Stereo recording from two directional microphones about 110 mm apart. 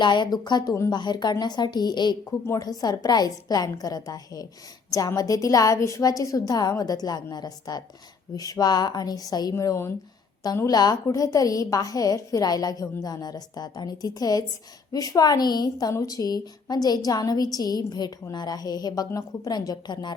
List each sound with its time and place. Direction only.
0.0 s a woman's voice: 45° left (ahead or behind)